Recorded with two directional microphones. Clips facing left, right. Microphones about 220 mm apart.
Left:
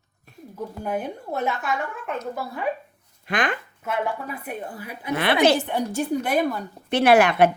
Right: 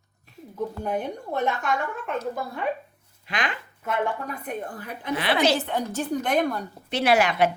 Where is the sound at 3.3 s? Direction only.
50° left (ahead or behind).